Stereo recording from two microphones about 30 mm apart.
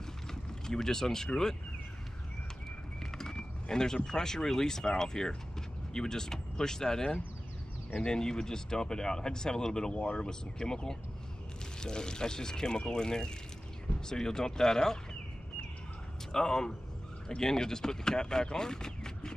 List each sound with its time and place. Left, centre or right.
0.0 s vehicle: centre
3.0 s speech: centre
16.3 s speech: centre